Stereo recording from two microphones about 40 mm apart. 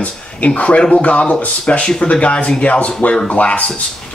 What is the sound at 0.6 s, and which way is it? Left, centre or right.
Speech, left.